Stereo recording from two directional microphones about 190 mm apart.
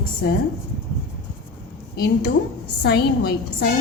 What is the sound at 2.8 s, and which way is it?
Speech, 55° left (ahead or behind).